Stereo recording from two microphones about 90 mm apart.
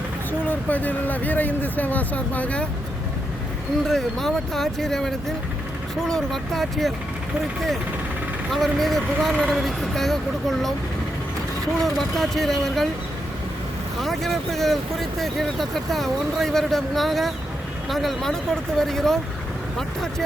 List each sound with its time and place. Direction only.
0.3 s speech: 20° left (ahead or behind)
3.8 s speech: 5° left (ahead or behind)
8.5 s speech: centre (ahead or behind)
11.8 s speech: centre (ahead or behind)
14.0 s speech: centre (ahead or behind)